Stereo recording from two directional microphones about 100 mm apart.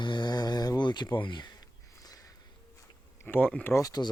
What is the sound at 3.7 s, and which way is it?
Speech, 40° left (ahead or behind).